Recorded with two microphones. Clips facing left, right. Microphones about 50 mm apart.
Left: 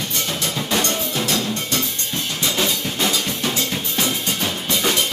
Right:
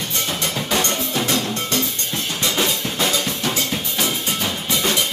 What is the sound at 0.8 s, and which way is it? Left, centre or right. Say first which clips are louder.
Drum: right 1 dB; right.